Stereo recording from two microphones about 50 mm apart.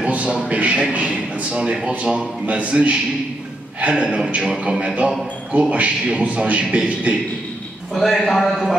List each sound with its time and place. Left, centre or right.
0.0 s a sound: right
0.5 s a man's voice: right
7.9 s a man's voice: centre